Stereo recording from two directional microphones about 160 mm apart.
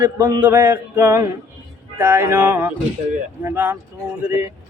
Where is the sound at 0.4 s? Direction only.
15° right (ahead or behind).